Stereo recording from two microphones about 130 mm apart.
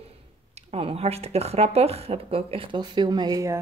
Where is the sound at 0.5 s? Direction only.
50° right (ahead or behind).